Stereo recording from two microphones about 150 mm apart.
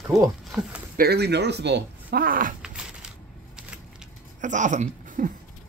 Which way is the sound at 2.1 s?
70° right (ahead or behind).